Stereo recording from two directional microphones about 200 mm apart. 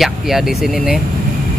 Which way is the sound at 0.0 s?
Centre (ahead or behind).